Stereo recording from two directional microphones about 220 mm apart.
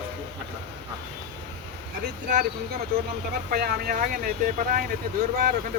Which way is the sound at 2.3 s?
45° right (ahead or behind).